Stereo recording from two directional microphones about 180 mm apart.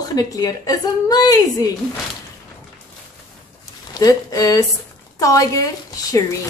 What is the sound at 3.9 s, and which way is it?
A woman's voice, 20° left (ahead or behind).